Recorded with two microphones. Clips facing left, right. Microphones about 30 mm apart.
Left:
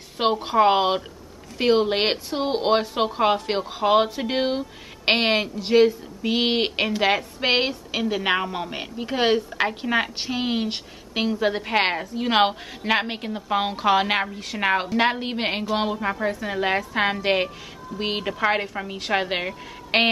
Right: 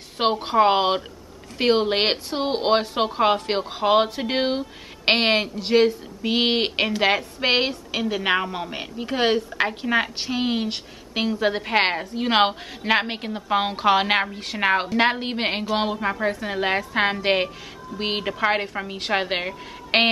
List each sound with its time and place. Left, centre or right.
0.2 s speech: centre